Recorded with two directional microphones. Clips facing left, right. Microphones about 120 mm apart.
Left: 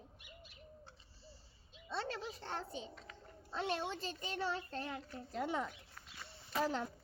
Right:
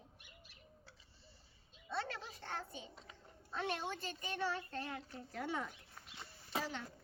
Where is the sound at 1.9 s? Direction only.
25° left (ahead or behind).